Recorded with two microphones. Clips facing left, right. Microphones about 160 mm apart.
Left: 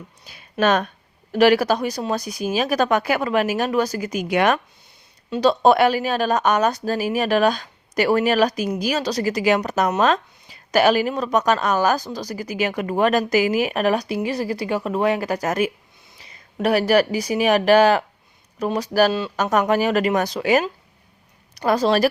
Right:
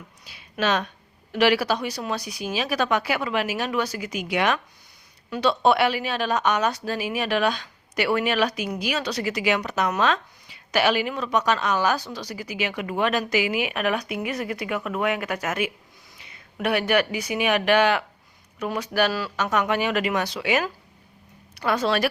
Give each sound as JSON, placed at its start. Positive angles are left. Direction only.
{"t": 0.3, "sound": "speech", "side_deg": 45}